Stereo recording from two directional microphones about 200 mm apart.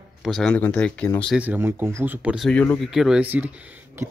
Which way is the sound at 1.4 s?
10° right (ahead or behind).